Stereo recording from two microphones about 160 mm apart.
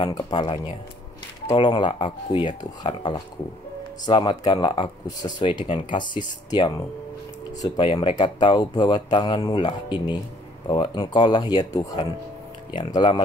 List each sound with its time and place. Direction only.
0.0 s speech: 25° left (ahead or behind)